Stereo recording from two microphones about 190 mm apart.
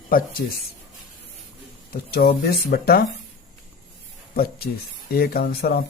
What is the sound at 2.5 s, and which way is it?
Speech, 55° left (ahead or behind).